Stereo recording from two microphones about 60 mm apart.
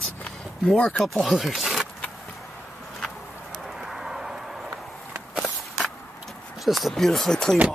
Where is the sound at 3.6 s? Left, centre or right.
Centre.